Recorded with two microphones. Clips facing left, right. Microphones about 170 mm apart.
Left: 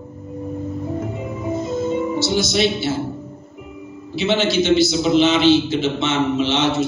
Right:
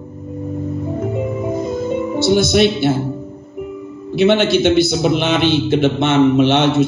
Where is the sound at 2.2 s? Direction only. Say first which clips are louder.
Right 10 dB; 55° right (ahead or behind).